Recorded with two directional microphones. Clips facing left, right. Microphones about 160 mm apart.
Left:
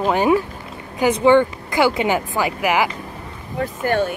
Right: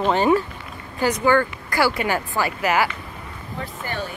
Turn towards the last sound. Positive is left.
turn(degrees=50)  # may be behind; listen again after turning